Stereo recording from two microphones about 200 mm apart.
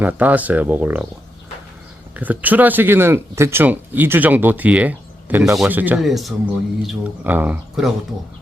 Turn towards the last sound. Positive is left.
turn(degrees=-5)  # may be behind; listen again after turning